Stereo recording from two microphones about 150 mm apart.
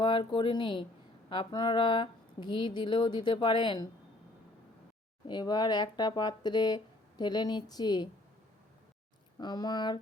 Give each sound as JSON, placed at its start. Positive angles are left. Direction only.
{"t": 0.0, "sound": "speech", "side_deg": 30}
{"t": 5.2, "sound": "speech", "side_deg": 30}
{"t": 9.4, "sound": "speech", "side_deg": 25}